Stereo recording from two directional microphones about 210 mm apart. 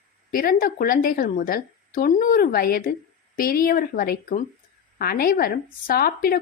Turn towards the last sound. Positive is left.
turn(degrees=45)  # may be behind; listen again after turning